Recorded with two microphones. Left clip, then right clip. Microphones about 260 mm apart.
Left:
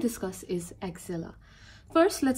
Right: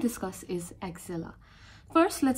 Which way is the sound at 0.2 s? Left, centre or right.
Centre.